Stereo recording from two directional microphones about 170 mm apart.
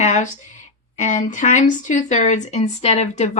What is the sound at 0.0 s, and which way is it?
Speech, 45° left (ahead or behind).